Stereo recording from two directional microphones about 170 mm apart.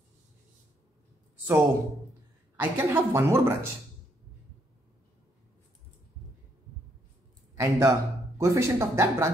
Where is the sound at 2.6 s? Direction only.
15° right (ahead or behind).